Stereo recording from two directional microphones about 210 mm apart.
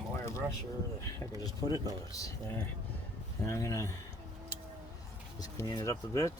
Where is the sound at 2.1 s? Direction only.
15° left (ahead or behind).